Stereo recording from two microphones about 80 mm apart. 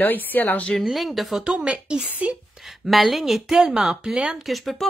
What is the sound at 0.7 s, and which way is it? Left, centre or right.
Speech, centre.